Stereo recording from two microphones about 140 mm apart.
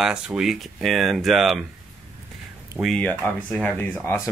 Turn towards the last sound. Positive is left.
turn(degrees=15)  # may be behind; listen again after turning